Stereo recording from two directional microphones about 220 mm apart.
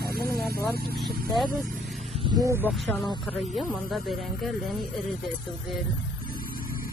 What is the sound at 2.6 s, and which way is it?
Speech, 10° left (ahead or behind).